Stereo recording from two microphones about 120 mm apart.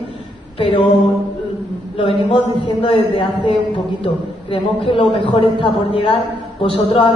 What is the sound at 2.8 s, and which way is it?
Speech, 45° left (ahead or behind).